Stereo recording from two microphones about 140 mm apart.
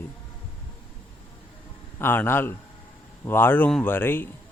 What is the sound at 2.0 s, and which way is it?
Speech, 15° left (ahead or behind).